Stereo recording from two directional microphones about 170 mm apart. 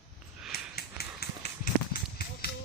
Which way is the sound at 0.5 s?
65° left (ahead or behind).